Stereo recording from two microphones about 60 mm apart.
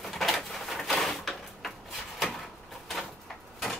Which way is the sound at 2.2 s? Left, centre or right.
Centre.